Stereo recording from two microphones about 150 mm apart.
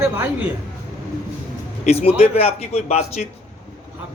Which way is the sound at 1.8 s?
45° left (ahead or behind).